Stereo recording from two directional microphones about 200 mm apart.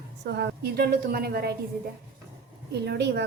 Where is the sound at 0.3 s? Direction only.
55° right (ahead or behind).